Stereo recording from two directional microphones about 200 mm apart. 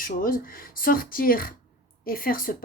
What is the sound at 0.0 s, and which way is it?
A woman's voice, 45° left (ahead or behind).